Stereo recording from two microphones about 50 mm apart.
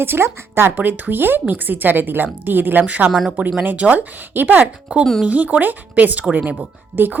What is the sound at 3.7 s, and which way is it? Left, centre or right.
Speech, right.